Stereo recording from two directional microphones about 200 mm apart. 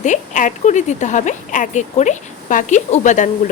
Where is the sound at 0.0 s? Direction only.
40° left (ahead or behind).